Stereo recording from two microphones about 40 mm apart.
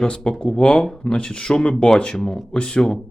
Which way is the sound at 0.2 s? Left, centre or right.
Centre.